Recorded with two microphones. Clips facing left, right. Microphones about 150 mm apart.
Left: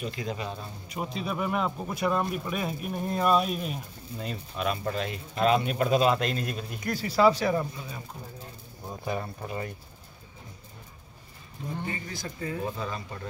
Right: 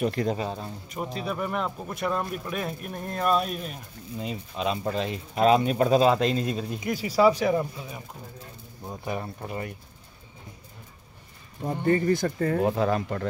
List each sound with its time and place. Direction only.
0.0 s speech: 60° right (ahead or behind)
0.3 s speech: 30° right (ahead or behind)
0.8 s speech: centre (ahead or behind)
4.2 s speech: 15° right (ahead or behind)
6.9 s speech: 10° right (ahead or behind)
9.0 s speech: 15° right (ahead or behind)
11.6 s speech: 55° right (ahead or behind)